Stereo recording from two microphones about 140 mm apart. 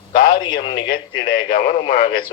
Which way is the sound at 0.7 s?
90° left.